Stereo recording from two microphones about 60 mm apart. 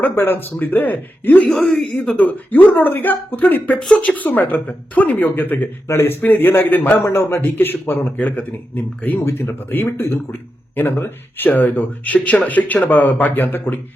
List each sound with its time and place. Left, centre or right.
0.2 s speech: left
1.4 s speech: left
1.6 s speech: centre
2.1 s speech: left
3.8 s speech: centre
9.2 s speech: left
9.6 s speech: left